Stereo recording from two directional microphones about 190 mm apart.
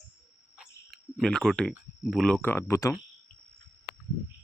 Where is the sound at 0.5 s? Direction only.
Centre (ahead or behind).